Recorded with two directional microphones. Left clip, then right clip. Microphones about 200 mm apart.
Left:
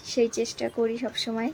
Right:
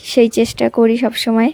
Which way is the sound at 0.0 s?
45° right (ahead or behind).